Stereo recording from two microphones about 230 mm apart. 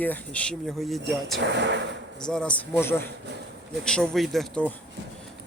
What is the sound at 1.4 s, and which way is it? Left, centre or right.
Speech, right.